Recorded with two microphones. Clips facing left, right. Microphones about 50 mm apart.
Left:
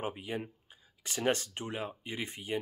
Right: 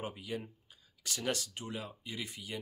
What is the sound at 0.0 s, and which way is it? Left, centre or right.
Speech, left.